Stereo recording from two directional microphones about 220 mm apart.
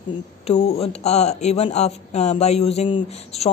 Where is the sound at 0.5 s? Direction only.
30° left (ahead or behind).